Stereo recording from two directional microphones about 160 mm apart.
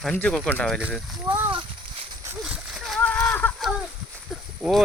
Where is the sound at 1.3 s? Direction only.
30° right (ahead or behind).